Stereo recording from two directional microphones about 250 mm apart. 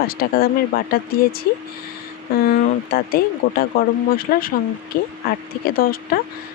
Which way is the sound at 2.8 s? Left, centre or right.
Left.